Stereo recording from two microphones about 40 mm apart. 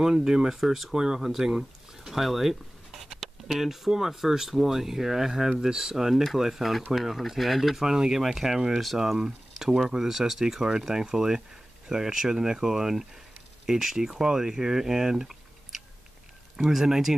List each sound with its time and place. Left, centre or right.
0.0 s speech: centre
0.6 s speech: centre
1.6 s a sound: centre
3.2 s speech: centre
7.8 s speech: centre